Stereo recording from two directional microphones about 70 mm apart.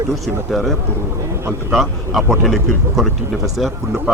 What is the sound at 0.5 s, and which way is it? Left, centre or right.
A man's voice, centre.